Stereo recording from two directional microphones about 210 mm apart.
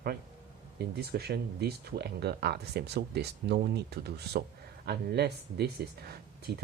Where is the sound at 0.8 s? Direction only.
50° right (ahead or behind).